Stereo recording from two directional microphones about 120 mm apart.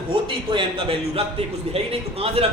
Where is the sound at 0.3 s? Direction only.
50° right (ahead or behind).